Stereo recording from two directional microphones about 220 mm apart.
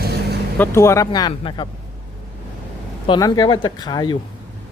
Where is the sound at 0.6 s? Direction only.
10° left (ahead or behind).